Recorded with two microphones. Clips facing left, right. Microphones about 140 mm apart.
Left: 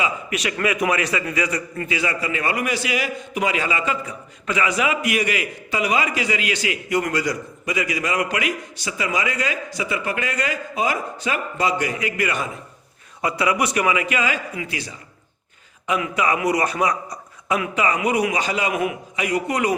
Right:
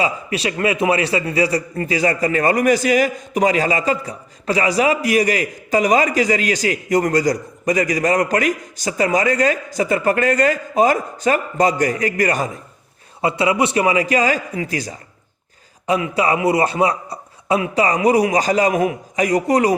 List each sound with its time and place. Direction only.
0.0 s a man's voice: 30° right (ahead or behind)
13.2 s a man's voice: 25° right (ahead or behind)